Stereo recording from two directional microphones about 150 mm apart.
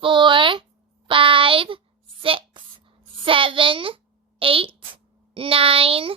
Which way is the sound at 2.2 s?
35° right (ahead or behind).